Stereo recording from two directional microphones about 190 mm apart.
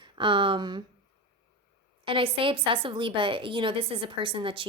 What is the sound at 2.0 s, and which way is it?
A woman's voice, 25° right (ahead or behind).